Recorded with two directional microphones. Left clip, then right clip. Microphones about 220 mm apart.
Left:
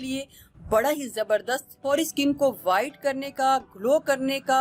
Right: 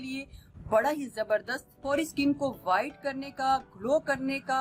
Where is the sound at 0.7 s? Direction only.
35° left (ahead or behind).